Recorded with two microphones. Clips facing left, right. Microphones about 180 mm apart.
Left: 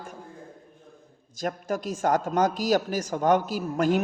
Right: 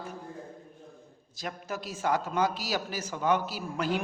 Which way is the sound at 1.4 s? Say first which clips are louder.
Left 7 dB; 45° left (ahead or behind).